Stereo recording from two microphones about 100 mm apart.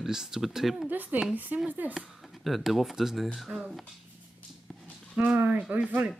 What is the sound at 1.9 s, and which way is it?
Speech, centre (ahead or behind).